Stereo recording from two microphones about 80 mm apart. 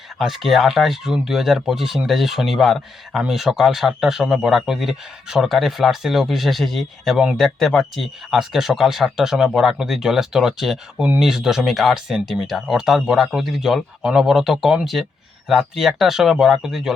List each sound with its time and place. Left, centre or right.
0.2 s speech: centre
10.9 s speech: centre
11.2 s speech: centre